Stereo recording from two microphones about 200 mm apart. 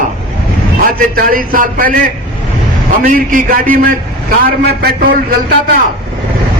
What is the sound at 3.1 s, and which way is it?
A man's voice, 45° right (ahead or behind).